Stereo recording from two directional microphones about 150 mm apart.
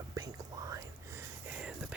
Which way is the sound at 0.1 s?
25° right (ahead or behind).